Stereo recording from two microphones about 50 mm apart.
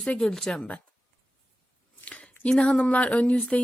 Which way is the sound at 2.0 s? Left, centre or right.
Left.